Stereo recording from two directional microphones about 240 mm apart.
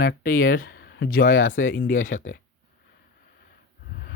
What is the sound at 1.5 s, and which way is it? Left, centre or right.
Speech, left.